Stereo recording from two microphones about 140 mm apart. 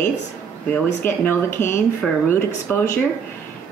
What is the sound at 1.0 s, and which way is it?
Speech, 15° left (ahead or behind).